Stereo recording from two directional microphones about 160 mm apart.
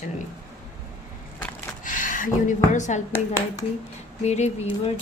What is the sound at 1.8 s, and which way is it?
Speech, 55° left (ahead or behind).